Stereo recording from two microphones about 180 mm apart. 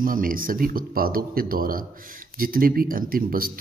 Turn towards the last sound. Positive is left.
turn(degrees=-55)  # may be behind; listen again after turning